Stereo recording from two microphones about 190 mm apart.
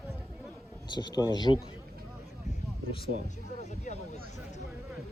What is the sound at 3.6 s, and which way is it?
Music, 35° left (ahead or behind).